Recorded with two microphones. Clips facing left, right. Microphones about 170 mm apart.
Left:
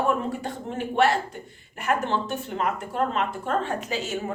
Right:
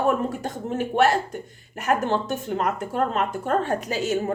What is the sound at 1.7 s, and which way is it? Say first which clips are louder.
Speech: right 3 dB; 40° right (ahead or behind).